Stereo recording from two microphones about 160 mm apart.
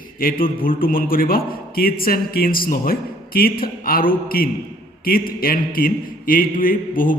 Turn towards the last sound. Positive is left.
turn(degrees=60)  # may be behind; listen again after turning